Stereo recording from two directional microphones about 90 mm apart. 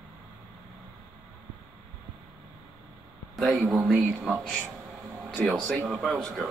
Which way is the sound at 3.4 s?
Centre (ahead or behind).